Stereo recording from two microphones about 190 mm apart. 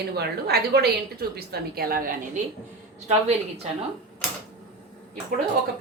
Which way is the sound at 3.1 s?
35° right (ahead or behind).